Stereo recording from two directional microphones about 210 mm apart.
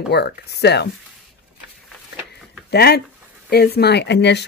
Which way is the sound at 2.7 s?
50° left (ahead or behind).